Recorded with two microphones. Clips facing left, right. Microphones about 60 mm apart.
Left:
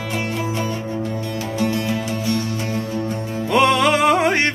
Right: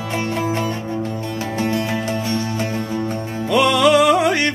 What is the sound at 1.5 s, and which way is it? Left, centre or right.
Music, right.